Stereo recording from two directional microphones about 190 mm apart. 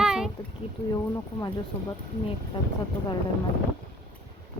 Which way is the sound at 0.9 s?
20° left (ahead or behind).